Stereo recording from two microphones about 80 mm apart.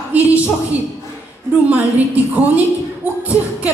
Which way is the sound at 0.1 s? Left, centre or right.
Centre.